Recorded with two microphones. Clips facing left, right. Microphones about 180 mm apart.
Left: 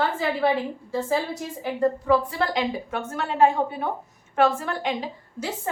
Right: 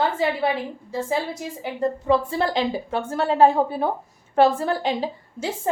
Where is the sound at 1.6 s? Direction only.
20° right (ahead or behind).